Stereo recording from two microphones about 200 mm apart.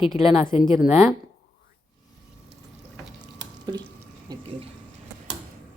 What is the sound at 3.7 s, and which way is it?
Speech, 20° right (ahead or behind).